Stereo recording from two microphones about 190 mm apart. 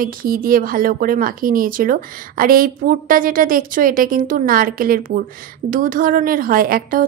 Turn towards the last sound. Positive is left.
turn(degrees=-50)  # may be behind; listen again after turning